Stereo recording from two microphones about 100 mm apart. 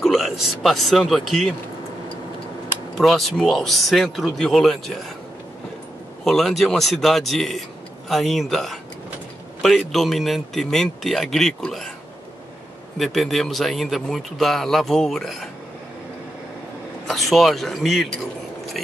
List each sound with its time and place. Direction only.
0.0 s speech: centre (ahead or behind)
3.0 s speech: centre (ahead or behind)
6.2 s speech: 5° left (ahead or behind)
13.0 s speech: centre (ahead or behind)
17.1 s speech: centre (ahead or behind)